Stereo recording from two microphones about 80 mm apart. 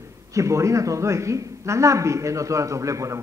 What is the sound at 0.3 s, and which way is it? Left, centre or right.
A man's voice, right.